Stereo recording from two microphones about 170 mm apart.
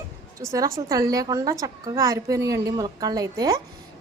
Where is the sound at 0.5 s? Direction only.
20° right (ahead or behind).